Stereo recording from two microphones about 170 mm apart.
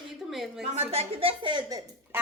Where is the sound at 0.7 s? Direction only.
40° right (ahead or behind); by 2.2 s 20° right (ahead or behind).